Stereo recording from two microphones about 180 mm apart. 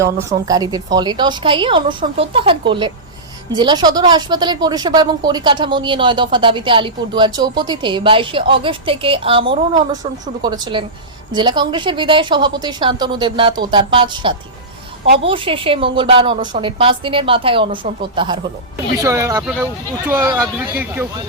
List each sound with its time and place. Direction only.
0.0 s speech: 20° right (ahead or behind)
18.9 s speech: 15° right (ahead or behind)